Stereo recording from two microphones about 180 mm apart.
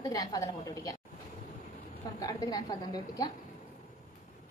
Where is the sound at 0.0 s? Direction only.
20° left (ahead or behind).